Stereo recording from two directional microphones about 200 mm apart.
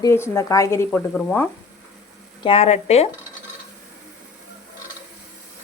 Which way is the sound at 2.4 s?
30° left (ahead or behind).